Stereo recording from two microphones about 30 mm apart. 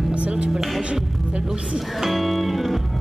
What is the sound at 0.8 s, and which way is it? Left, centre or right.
Music, right.